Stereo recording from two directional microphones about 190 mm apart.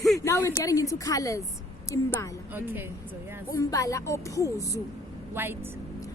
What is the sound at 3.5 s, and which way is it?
Speech, 15° left (ahead or behind).